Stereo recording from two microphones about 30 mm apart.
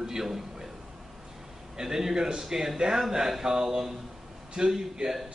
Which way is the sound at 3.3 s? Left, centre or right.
Centre.